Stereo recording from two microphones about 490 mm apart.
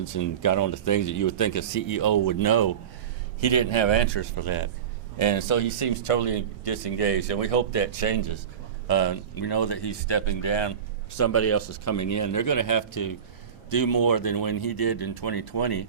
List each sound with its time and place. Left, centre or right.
0.0 s speech: left
3.4 s a man's voice: left
5.1 s speech: left
8.9 s speech: left
11.1 s speech: left